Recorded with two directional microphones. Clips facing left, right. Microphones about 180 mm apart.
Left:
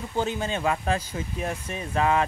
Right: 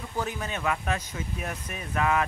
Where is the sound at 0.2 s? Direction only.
25° left (ahead or behind).